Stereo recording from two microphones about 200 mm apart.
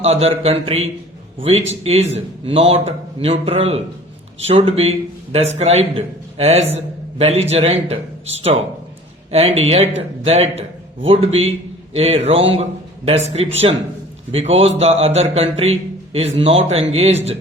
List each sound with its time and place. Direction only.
0.0 s a man's voice: 30° right (ahead or behind)